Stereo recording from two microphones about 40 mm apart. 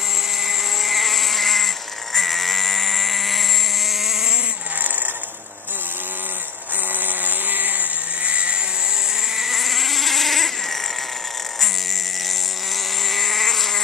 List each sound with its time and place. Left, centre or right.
0.5 s vehicle: centre
2.1 s sheep: centre
7.1 s chainsaw: right
8.3 s vehicle: right
9.4 s insect: centre
13.1 s a sound: centre